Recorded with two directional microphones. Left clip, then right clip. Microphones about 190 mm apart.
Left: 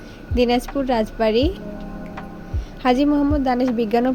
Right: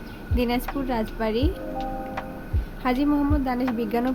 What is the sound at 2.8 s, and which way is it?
A woman's voice, 25° left (ahead or behind).